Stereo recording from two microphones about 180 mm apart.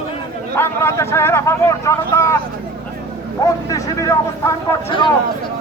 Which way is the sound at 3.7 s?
20° left (ahead or behind).